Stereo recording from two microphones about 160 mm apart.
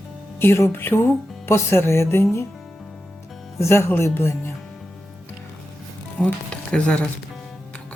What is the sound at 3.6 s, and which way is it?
Speech, 15° left (ahead or behind).